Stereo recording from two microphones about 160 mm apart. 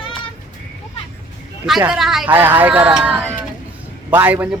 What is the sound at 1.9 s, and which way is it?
Speech, centre (ahead or behind).